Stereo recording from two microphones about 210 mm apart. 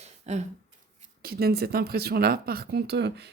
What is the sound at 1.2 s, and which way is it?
Speech, 45° right (ahead or behind).